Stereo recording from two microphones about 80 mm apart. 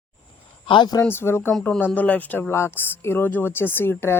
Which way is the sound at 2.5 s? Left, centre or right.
Left.